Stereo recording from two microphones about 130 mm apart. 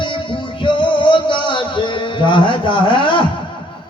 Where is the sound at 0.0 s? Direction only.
40° left (ahead or behind).